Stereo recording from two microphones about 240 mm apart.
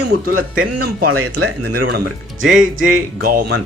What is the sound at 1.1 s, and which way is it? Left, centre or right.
Speech, right.